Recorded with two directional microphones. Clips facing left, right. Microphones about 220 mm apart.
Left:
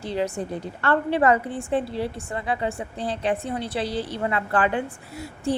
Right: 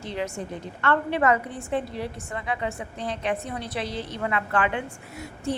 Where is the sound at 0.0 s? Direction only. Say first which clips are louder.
Left 4 dB; 35° left (ahead or behind).